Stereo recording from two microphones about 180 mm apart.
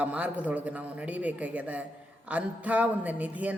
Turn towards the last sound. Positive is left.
turn(degrees=-10)  # may be behind; listen again after turning